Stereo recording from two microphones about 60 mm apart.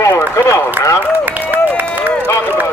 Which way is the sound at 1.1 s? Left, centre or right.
Right.